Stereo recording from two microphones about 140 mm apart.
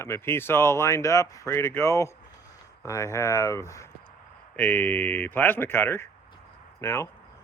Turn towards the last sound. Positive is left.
turn(degrees=20)  # may be behind; listen again after turning